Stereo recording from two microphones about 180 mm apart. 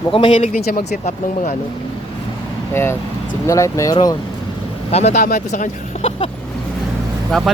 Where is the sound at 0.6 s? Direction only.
55° left (ahead or behind).